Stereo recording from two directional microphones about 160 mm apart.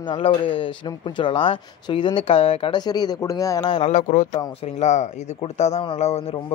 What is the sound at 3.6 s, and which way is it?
Speech, 40° left (ahead or behind).